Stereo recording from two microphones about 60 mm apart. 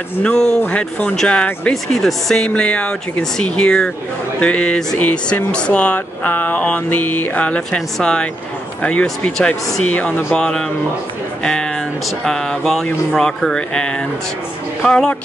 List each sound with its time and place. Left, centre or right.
0.2 s speech: centre
0.6 s speech: left
1.0 s speech: centre
1.7 s speech: centre
2.4 s speech: centre
11.4 s a sound: centre
12.3 s speech: centre